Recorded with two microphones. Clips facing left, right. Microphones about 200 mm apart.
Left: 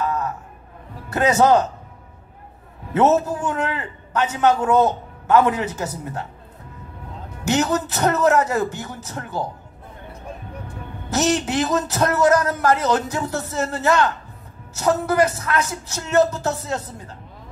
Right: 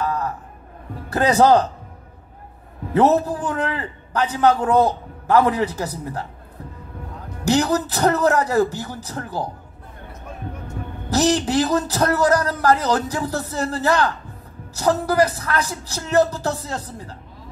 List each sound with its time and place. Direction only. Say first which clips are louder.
0.0 s a sound: even; 35° right (ahead or behind)
1.1 s a man's voice: right 1 dB; 35° right (ahead or behind)
2.9 s a man's voice: right 1 dB; 35° right (ahead or behind)
7.4 s a man's voice: right 2 dB; 35° right (ahead or behind)
11.1 s a man's voice: right 2 dB; 35° right (ahead or behind)